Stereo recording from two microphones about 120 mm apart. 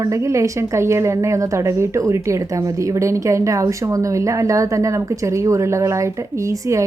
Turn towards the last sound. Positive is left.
turn(degrees=-25)  # may be behind; listen again after turning